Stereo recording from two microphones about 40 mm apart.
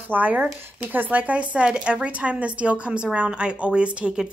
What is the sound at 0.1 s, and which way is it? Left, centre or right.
A woman's voice, right.